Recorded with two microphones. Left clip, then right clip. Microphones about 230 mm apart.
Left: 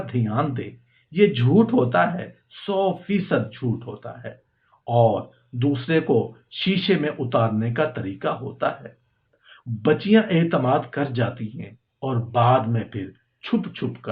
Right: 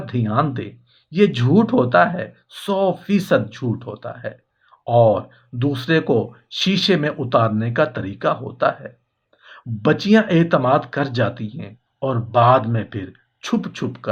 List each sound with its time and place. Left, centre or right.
0.0 s speech: right